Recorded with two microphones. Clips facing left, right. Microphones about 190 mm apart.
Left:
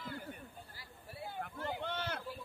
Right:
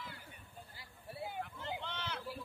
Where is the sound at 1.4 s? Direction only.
50° left (ahead or behind).